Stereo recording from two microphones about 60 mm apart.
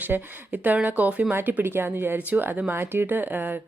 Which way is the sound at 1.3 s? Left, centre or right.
Right.